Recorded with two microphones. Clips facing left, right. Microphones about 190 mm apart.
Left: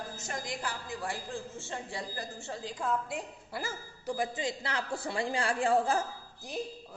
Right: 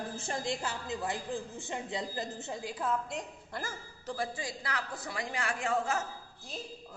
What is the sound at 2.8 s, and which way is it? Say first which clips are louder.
A woman's voice: left 1 dB; centre (ahead or behind).